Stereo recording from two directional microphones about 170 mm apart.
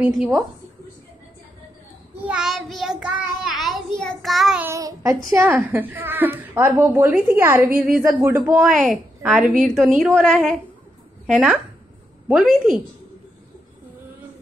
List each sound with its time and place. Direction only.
0.0 s a woman's voice: centre (ahead or behind)
2.2 s child singing: 5° right (ahead or behind)
4.0 s a woman's voice: centre (ahead or behind)
4.6 s a woman's voice: 15° right (ahead or behind)
8.6 s a woman's voice: centre (ahead or behind)